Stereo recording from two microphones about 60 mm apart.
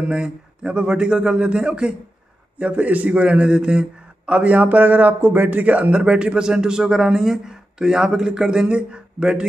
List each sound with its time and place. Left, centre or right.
0.0 s a man's voice: centre